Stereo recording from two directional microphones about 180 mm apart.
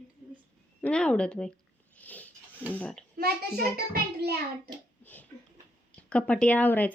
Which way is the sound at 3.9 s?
60° right (ahead or behind).